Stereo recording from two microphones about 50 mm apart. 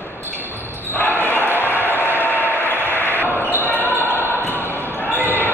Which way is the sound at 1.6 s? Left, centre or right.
Left.